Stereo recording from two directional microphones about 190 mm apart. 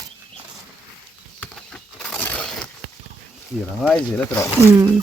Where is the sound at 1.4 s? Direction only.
5° left (ahead or behind).